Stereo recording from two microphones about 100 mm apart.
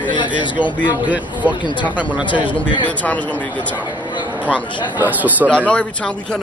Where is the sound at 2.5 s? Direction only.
50° left (ahead or behind).